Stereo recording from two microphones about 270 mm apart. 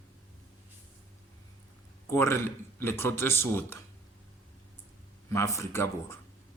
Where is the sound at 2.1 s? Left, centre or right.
Centre.